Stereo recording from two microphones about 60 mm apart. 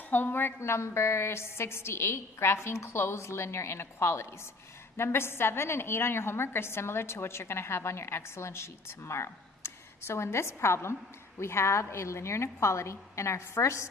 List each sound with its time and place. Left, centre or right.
0.1 s a woman's voice: left